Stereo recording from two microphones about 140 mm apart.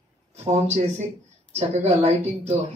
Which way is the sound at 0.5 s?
55° right (ahead or behind).